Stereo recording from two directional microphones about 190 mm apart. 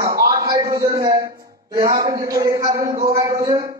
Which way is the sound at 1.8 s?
20° right (ahead or behind).